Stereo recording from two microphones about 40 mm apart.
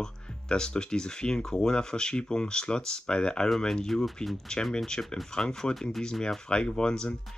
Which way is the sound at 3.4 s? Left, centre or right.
Centre.